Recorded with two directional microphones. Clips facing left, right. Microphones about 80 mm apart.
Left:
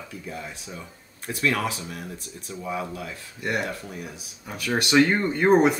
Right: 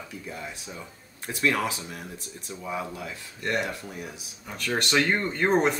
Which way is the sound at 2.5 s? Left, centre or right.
Centre.